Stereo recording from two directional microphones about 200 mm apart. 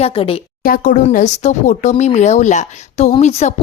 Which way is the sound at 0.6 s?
45° left (ahead or behind).